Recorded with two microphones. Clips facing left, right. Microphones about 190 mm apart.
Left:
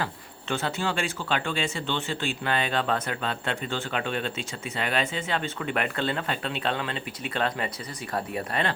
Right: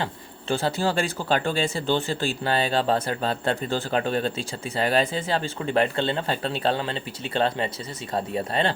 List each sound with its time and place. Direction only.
0.0 s speech: 30° right (ahead or behind)